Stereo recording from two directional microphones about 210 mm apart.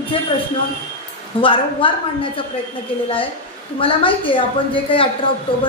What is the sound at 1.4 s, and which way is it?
Speech, 25° left (ahead or behind).